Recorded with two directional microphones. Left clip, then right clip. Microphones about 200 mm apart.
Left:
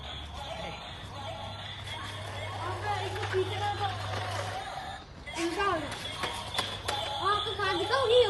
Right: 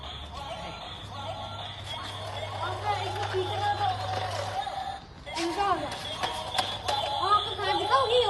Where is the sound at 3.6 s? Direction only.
50° right (ahead or behind).